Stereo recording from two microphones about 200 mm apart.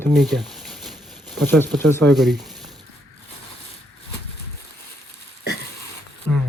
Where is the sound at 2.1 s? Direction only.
Centre (ahead or behind).